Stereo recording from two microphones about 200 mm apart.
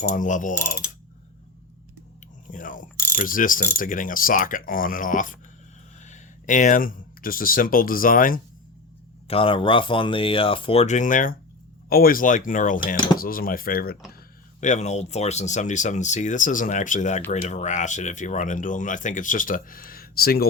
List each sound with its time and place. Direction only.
0.1 s speech: 40° left (ahead or behind)
2.5 s speech: 40° left (ahead or behind)
3.2 s mechanisms: 45° left (ahead or behind)
6.0 s speech: 35° left (ahead or behind)
9.2 s speech: 25° left (ahead or behind)
13.1 s mechanisms: 45° left (ahead or behind)
14.6 s speech: 35° left (ahead or behind)